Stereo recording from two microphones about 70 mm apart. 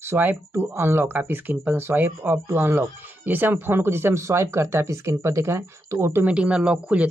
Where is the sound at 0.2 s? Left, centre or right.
Right.